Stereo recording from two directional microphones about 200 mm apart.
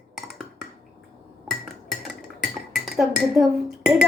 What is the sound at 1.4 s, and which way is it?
Music, centre (ahead or behind).